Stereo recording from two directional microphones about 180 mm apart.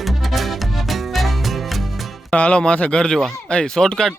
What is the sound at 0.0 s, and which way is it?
Music, centre (ahead or behind).